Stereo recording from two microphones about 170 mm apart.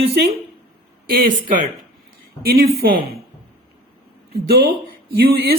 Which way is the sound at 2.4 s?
60° right (ahead or behind).